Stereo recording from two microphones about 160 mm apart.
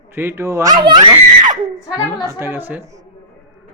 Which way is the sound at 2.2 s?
15° right (ahead or behind).